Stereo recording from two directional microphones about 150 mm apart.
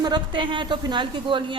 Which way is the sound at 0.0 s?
30° right (ahead or behind).